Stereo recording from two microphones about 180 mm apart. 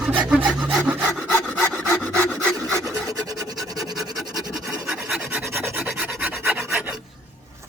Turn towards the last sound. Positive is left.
turn(degrees=-5)  # may be behind; listen again after turning